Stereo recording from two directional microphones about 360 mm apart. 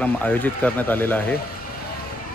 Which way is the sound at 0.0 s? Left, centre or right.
Centre.